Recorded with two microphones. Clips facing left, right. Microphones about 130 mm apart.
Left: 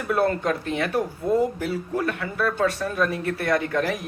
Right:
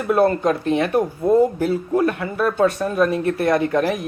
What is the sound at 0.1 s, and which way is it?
Speech, 35° right (ahead or behind).